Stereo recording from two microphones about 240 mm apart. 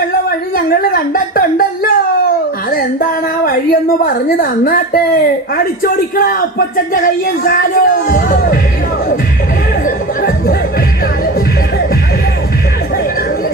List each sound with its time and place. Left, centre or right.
0.3 s a sound: left
2.6 s a woman's voice: left
5.8 s speech: left
9.8 s music: left